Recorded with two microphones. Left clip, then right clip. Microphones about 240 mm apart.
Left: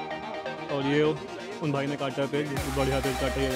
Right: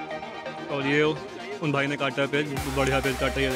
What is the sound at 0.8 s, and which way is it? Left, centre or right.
Speech, centre.